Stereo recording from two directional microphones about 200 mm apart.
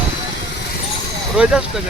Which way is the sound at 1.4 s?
5° right (ahead or behind).